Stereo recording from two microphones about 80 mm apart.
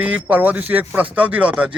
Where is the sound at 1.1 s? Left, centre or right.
Centre.